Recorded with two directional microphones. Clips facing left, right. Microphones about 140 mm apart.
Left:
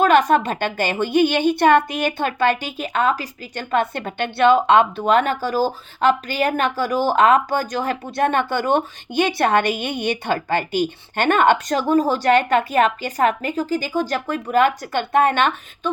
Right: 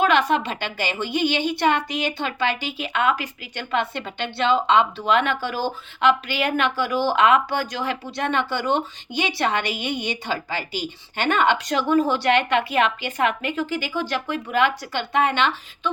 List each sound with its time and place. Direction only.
0.0 s speech: 45° left (ahead or behind)